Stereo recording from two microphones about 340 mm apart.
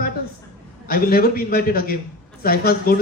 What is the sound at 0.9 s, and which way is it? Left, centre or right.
A man's voice, left.